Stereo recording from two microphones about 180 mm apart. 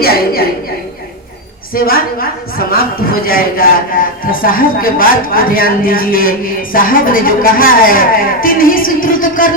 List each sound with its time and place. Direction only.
0.0 s a woman's voice: 55° left (ahead or behind)
1.7 s a woman's voice: 55° left (ahead or behind)